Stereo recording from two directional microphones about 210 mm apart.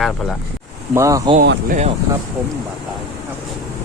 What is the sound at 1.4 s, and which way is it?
Speech, 45° right (ahead or behind).